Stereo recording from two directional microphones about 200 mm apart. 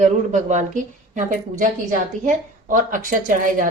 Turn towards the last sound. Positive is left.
turn(degrees=-45)  # may be behind; listen again after turning